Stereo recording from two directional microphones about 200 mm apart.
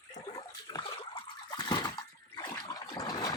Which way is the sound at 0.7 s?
20° left (ahead or behind).